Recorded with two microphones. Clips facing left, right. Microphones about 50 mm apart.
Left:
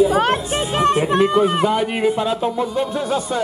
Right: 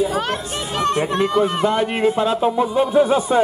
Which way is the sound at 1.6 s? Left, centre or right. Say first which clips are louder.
Even; centre.